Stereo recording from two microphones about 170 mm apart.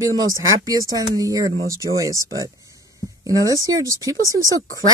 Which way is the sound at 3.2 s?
20° right (ahead or behind).